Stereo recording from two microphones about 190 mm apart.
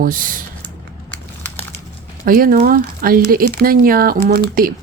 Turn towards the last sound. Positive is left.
turn(degrees=-55)  # may be behind; listen again after turning